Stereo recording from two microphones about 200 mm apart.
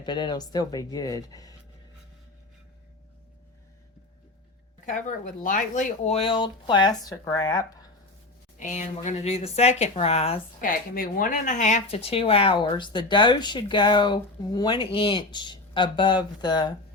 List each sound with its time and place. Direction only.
0.0 s speech: 20° left (ahead or behind)
4.9 s speech: 40° left (ahead or behind); by 7.9 s 20° left (ahead or behind)
8.5 s speech: 40° left (ahead or behind)
10.6 s speech: 45° left (ahead or behind); by 16.7 s 20° left (ahead or behind)